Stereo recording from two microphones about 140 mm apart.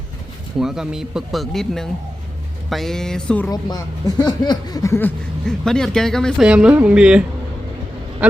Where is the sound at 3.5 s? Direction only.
30° left (ahead or behind).